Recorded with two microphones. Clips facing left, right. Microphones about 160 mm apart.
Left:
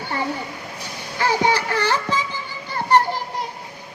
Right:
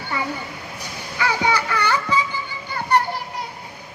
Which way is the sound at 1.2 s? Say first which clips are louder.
Left 2 dB; 35° left (ahead or behind).